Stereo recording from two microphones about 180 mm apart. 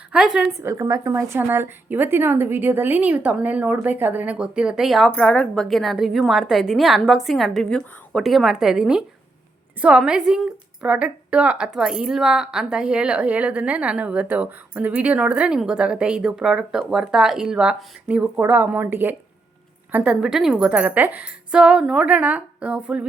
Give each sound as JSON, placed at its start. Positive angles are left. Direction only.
{"t": 0.1, "sound": "speech", "side_deg": -5}
{"t": 0.5, "sound": "a woman's voice", "side_deg": -15}